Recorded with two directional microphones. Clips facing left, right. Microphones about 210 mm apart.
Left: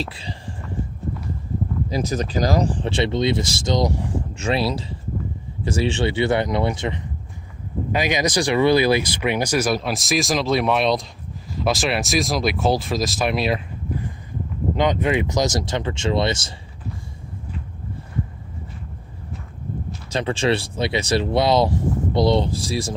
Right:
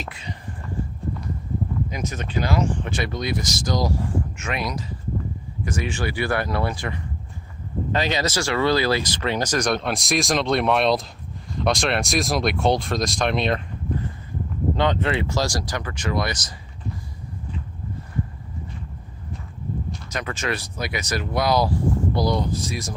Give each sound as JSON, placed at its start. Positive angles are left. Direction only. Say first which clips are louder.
{"t": 0.0, "sound": "speech", "louder": "left 4 dB", "side_deg": 30}
{"t": 1.9, "sound": "speech", "louder": "left 6 dB", "side_deg": 35}
{"t": 20.1, "sound": "speech", "louder": "left 8 dB", "side_deg": 30}